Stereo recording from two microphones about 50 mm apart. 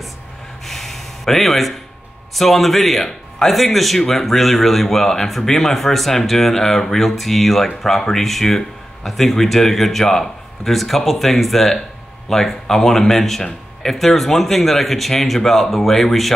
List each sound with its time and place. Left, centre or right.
0.7 s gasp: centre
2.3 s a man's voice: centre